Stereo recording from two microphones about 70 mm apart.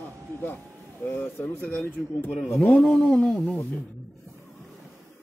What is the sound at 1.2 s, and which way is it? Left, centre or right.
Speech, left.